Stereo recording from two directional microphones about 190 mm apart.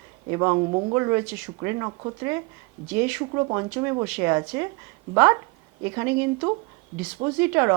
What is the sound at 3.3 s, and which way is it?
Speech, 20° right (ahead or behind).